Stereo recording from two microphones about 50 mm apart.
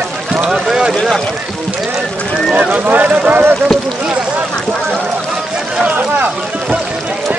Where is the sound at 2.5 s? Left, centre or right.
Right.